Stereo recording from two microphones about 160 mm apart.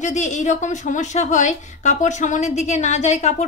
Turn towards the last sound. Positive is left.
turn(degrees=45)  # may be behind; listen again after turning